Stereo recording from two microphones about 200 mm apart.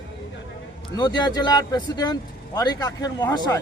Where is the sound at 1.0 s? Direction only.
20° left (ahead or behind).